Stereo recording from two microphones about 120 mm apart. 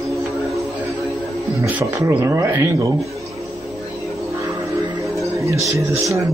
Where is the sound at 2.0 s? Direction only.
25° right (ahead or behind).